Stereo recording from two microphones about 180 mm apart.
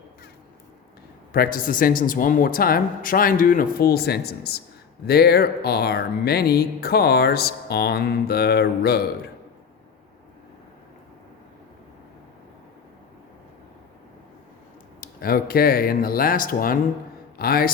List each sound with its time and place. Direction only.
1.3 s speech: 55° left (ahead or behind)
15.0 s a man's voice: 55° left (ahead or behind)